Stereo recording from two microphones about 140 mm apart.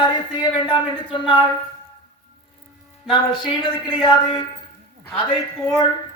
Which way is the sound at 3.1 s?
35° left (ahead or behind).